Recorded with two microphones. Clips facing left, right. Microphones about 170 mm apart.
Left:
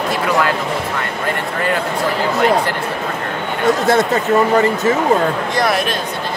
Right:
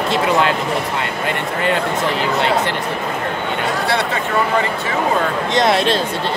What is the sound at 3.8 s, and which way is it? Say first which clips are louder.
Speech: left 5 dB; 45° left (ahead or behind).